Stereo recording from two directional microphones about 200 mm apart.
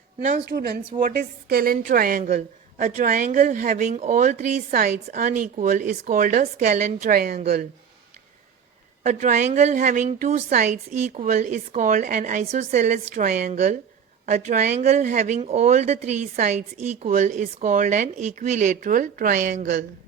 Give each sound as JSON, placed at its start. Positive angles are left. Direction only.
{"t": 0.3, "sound": "a woman's voice", "side_deg": -55}
{"t": 9.0, "sound": "a woman's voice", "side_deg": -40}